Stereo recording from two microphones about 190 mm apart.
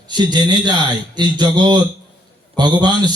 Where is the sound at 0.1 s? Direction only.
20° right (ahead or behind).